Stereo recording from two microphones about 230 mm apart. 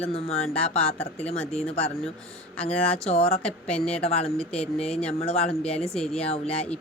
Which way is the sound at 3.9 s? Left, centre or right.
Left.